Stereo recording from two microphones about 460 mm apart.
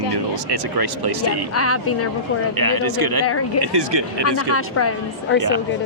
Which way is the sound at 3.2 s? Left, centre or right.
Left.